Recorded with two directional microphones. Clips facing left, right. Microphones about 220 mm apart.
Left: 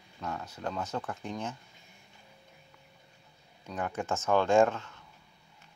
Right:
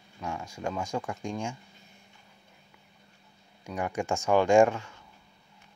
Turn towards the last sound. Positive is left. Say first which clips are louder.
# right 3 dB
turn(degrees=-15)  # may be behind; listen again after turning